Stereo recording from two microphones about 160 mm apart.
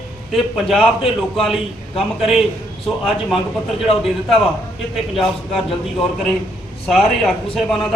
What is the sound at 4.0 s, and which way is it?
A man's voice, centre (ahead or behind).